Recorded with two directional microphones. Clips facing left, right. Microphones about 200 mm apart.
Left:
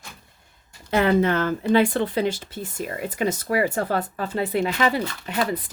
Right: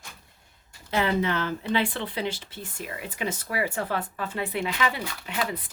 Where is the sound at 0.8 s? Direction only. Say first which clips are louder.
Left 6 dB; 50° left (ahead or behind).